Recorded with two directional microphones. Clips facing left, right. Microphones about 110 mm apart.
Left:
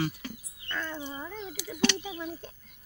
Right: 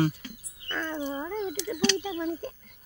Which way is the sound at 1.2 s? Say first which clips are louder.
Right 7 dB; 50° right (ahead or behind).